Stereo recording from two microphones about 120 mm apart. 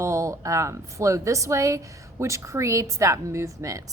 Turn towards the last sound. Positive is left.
turn(degrees=-25)  # may be behind; listen again after turning